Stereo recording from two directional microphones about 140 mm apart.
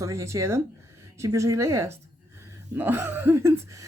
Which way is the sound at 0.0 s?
20° right (ahead or behind).